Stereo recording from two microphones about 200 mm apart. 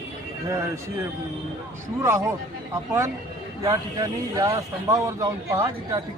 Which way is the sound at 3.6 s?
20° right (ahead or behind).